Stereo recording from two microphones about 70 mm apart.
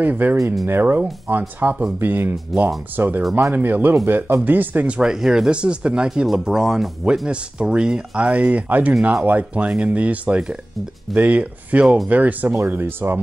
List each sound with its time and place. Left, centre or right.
0.0 s speech: right
4.5 s speech: right